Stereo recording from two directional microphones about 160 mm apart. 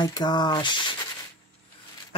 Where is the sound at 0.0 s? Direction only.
25° left (ahead or behind).